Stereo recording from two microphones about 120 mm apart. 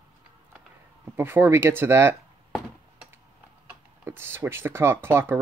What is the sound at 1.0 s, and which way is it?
Speech, 20° right (ahead or behind).